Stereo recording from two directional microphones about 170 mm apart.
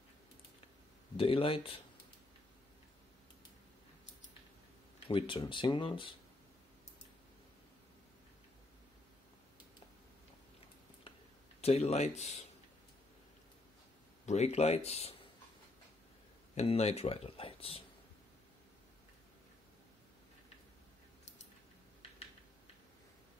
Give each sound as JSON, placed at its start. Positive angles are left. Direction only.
{"t": 1.1, "sound": "speech", "side_deg": 30}
{"t": 5.0, "sound": "speech", "side_deg": 30}
{"t": 11.6, "sound": "speech", "side_deg": 40}
{"t": 14.2, "sound": "speech", "side_deg": 40}
{"t": 16.5, "sound": "speech", "side_deg": 40}